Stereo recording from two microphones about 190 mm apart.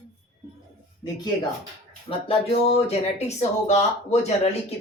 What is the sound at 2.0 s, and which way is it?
Speech, 30° left (ahead or behind).